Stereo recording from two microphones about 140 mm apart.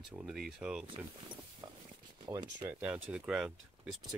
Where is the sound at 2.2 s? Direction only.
30° right (ahead or behind).